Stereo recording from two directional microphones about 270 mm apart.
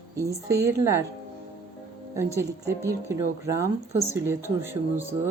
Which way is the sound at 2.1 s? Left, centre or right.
Centre.